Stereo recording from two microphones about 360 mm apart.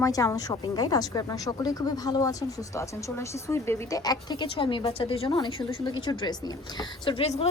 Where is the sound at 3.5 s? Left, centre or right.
Centre.